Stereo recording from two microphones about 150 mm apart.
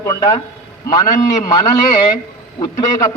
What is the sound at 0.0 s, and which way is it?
A man's voice, 20° left (ahead or behind).